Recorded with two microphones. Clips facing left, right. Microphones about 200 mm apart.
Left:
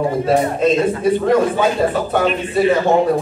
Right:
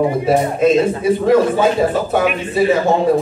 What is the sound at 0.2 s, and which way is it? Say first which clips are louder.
A man's voice: right 1 dB; 10° right (ahead or behind).